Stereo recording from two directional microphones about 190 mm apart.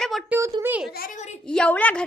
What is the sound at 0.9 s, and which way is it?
Speech, 50° left (ahead or behind).